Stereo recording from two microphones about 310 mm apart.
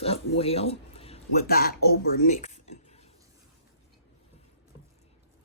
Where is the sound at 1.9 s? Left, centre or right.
Left.